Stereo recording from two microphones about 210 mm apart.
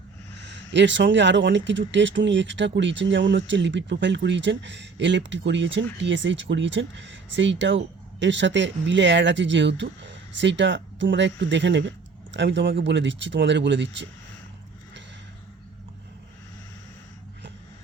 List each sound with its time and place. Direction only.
0.7 s speech: 60° right (ahead or behind)